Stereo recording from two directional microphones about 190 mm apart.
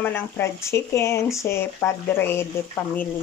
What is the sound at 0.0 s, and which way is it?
Speech, 10° left (ahead or behind).